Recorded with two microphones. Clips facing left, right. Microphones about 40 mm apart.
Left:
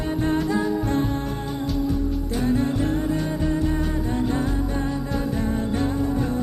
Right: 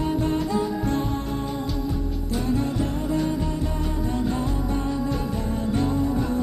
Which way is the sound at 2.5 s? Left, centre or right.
Left.